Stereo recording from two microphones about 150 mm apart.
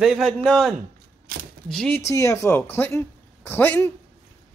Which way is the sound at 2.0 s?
20° left (ahead or behind).